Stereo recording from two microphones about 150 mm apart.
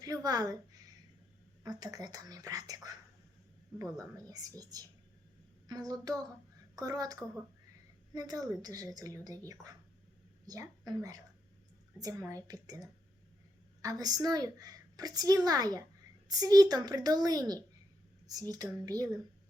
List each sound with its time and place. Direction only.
0.0 s a sound: 25° right (ahead or behind)
1.6 s a woman's voice: 25° right (ahead or behind)
3.9 s a woman's voice: 25° right (ahead or behind)
10.4 s a woman's voice: 25° right (ahead or behind)